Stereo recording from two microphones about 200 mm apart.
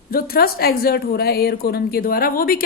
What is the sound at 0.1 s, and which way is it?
A woman's voice, 50° left (ahead or behind).